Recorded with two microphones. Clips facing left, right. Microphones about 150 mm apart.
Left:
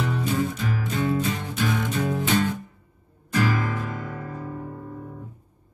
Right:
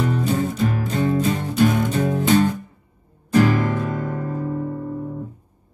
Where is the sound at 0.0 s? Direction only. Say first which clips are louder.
Right 4 dB; 40° right (ahead or behind).